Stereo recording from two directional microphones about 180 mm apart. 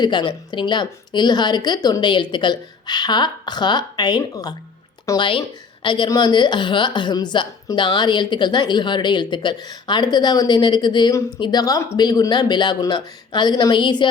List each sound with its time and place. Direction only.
0.0 s a woman's voice: 25° left (ahead or behind)